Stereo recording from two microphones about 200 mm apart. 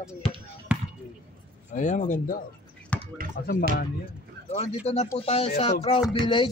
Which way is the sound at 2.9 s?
5° left (ahead or behind).